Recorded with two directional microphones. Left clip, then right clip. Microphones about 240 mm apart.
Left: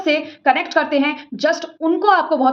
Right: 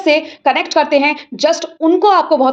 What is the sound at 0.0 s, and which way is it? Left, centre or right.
A woman's voice, right.